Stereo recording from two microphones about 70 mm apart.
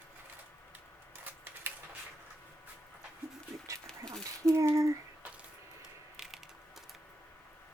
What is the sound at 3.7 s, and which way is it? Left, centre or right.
Dog, right.